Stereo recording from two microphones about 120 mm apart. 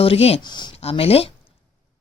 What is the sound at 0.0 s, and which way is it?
Speech, 55° left (ahead or behind).